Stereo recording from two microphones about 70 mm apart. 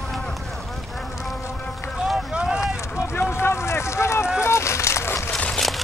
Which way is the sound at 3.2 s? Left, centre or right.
Left.